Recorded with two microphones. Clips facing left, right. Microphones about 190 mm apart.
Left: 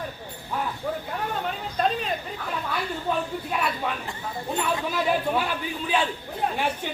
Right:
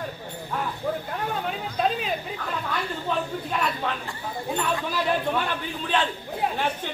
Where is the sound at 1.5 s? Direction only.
Centre (ahead or behind).